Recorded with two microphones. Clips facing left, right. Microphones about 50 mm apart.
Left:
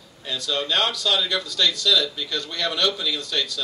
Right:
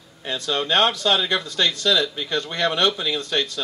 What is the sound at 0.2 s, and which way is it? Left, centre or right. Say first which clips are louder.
Speech: right 2 dB; right.